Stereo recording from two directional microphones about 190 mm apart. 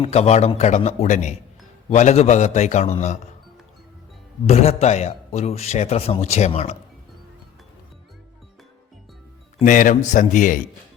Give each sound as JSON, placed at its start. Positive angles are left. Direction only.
{"t": 0.0, "sound": "a man's voice", "side_deg": 35}
{"t": 4.4, "sound": "a man's voice", "side_deg": 35}
{"t": 9.6, "sound": "a man's voice", "side_deg": 45}